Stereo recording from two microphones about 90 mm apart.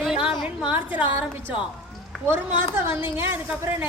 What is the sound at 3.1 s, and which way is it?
Speech, 25° right (ahead or behind).